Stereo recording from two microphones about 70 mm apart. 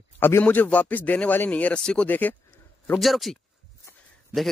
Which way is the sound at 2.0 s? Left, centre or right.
Left.